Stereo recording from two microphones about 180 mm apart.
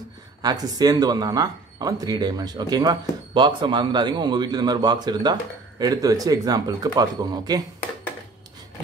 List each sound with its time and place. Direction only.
0.4 s speech: 20° right (ahead or behind)